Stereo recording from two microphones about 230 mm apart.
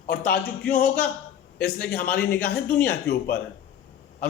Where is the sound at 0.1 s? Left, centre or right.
Left.